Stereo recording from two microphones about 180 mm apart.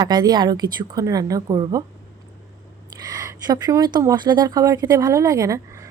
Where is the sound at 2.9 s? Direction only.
20° right (ahead or behind).